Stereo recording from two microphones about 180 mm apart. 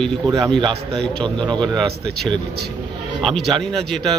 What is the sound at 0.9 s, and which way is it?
Speech, 5° left (ahead or behind).